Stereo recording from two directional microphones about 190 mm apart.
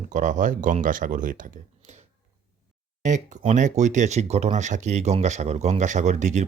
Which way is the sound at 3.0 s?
40° right (ahead or behind).